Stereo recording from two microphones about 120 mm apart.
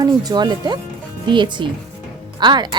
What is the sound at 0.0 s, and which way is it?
Speech, 35° right (ahead or behind).